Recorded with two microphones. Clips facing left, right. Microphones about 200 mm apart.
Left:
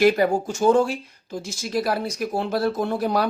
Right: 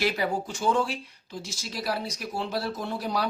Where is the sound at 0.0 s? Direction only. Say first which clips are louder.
Left 9 dB; 45° left (ahead or behind).